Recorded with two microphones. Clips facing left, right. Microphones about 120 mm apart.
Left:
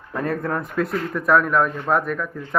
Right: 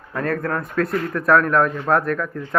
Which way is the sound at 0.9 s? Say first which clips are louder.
Right 2 dB; 5° left (ahead or behind).